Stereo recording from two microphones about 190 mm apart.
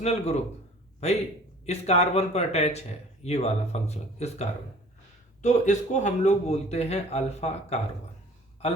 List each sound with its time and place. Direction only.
0.0 s speech: 35° left (ahead or behind)